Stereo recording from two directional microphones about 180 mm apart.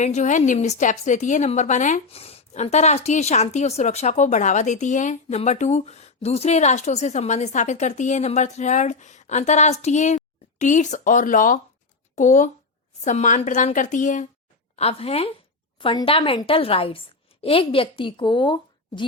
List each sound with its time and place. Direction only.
0.0 s a woman's voice: 40° left (ahead or behind)
14.8 s a woman's voice: 35° left (ahead or behind)